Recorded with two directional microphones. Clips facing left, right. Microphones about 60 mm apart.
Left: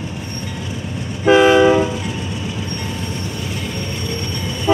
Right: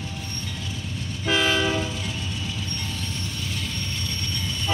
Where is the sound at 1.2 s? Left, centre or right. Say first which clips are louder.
Left 12 dB; left.